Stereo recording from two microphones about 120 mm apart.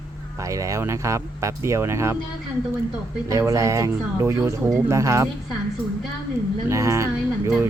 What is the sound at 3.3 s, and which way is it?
Speech, 25° right (ahead or behind).